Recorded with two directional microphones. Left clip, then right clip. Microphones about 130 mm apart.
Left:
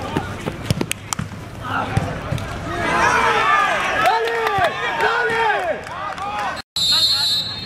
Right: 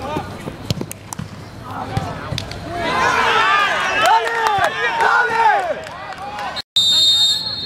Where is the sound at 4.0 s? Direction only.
15° right (ahead or behind).